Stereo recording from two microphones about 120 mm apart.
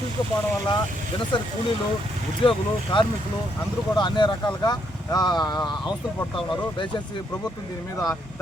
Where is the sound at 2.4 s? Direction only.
45° left (ahead or behind).